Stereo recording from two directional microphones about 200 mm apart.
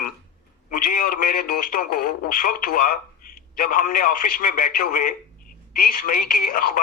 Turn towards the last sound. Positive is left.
turn(degrees=45)  # may be behind; listen again after turning